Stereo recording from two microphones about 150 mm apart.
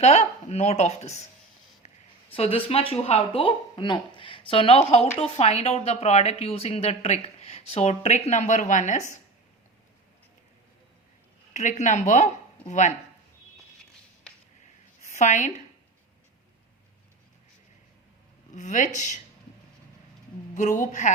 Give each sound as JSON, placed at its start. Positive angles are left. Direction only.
{"t": 0.0, "sound": "speech", "side_deg": 45}
{"t": 1.8, "sound": "a sound", "side_deg": 45}
{"t": 2.3, "sound": "speech", "side_deg": 40}
{"t": 11.5, "sound": "speech", "side_deg": 55}
{"t": 15.0, "sound": "a woman's voice", "side_deg": 55}
{"t": 18.5, "sound": "speech", "side_deg": 55}
{"t": 20.5, "sound": "a woman's voice", "side_deg": 55}